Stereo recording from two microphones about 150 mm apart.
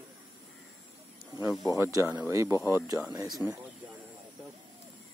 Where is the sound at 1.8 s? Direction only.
20° right (ahead or behind).